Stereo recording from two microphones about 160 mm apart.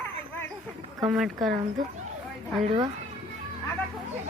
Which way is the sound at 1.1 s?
5° right (ahead or behind).